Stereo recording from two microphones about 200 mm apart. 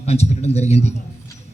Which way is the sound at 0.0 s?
30° left (ahead or behind).